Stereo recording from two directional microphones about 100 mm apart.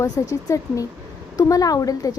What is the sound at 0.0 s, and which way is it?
A woman's voice, 35° left (ahead or behind).